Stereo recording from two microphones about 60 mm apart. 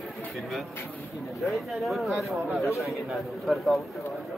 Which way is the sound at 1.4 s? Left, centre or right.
Centre.